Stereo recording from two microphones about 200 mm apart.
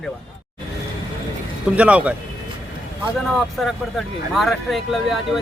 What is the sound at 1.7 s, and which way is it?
Speech, 5° right (ahead or behind).